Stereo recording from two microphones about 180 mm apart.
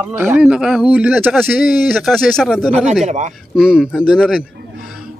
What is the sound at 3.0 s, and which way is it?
Speech, 40° right (ahead or behind).